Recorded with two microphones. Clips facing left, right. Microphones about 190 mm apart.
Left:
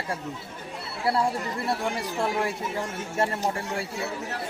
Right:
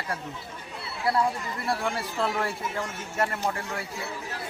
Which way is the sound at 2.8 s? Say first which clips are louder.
Left 2 dB; 25° left (ahead or behind).